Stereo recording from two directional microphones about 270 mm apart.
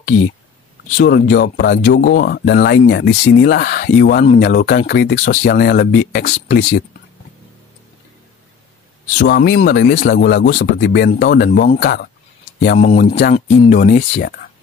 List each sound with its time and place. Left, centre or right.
0.9 s speech: left
9.2 s speech: left